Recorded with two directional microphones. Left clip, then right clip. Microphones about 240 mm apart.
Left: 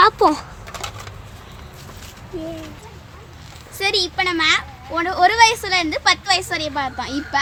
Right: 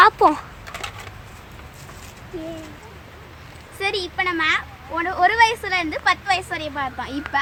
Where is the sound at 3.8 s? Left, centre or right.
Centre.